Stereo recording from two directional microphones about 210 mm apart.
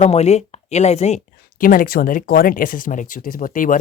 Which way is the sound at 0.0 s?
30° left (ahead or behind).